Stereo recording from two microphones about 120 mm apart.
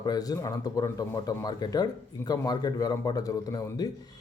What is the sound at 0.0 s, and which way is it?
A man's voice, 30° left (ahead or behind).